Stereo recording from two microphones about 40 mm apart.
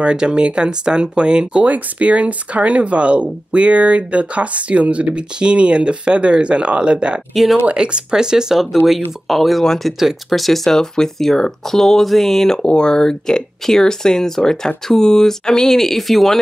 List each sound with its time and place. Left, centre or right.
0.0 s speech: right
1.7 s speech: right; by 8.6 s centre
8.8 s speech: centre
12.6 s speech: left; by 16.3 s centre